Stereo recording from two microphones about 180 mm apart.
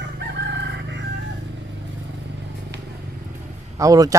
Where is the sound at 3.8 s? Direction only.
20° right (ahead or behind).